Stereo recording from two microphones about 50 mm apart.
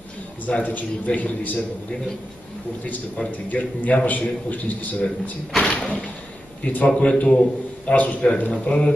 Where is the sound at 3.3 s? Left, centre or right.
Left.